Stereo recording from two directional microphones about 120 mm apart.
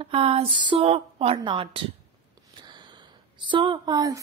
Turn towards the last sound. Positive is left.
turn(degrees=-30)  # may be behind; listen again after turning